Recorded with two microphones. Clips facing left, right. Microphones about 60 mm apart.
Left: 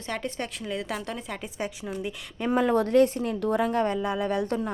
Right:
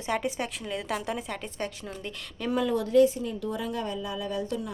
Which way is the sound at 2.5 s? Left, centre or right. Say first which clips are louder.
Left 2 dB; left.